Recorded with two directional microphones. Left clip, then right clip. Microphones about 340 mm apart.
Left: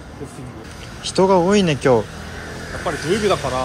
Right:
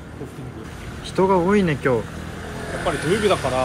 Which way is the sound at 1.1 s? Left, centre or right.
Centre.